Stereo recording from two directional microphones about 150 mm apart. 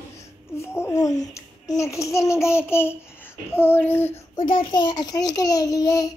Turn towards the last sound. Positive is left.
turn(degrees=25)  # may be behind; listen again after turning